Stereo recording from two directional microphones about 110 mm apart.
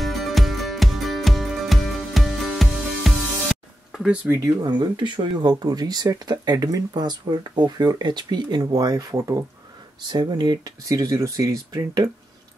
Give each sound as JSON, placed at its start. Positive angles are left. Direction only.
{"t": 0.0, "sound": "music", "side_deg": 0}
{"t": 4.1, "sound": "speech", "side_deg": -10}
{"t": 4.4, "sound": "speech", "side_deg": -40}